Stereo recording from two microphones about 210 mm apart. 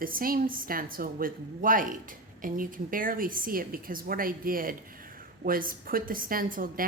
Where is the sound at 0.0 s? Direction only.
45° right (ahead or behind).